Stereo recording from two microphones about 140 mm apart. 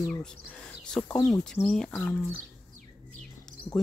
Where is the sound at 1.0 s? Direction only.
10° left (ahead or behind).